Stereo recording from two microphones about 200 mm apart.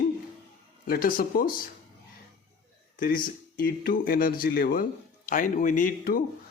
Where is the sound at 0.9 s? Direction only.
45° left (ahead or behind).